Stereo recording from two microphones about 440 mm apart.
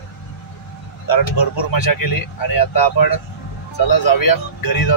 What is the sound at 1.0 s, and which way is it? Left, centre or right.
Speech, left.